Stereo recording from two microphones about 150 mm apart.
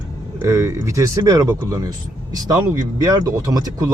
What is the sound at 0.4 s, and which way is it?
Speech, 20° right (ahead or behind).